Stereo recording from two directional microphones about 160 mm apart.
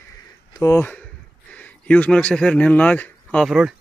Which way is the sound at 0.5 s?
20° left (ahead or behind).